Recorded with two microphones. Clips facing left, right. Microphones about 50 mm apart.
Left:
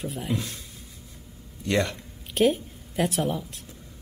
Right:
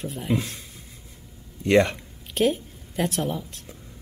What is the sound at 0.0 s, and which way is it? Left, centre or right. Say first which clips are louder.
Speech: even; centre.